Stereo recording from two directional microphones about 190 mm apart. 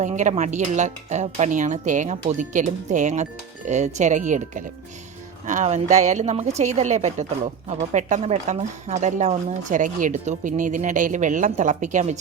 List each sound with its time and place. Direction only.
0.0 s speech: 40° right (ahead or behind)